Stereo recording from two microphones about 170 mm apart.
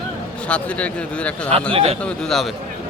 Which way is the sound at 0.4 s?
5° left (ahead or behind).